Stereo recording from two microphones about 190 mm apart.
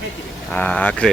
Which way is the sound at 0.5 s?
5° left (ahead or behind).